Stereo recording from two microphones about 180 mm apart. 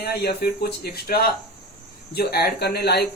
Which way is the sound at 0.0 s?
60° left (ahead or behind).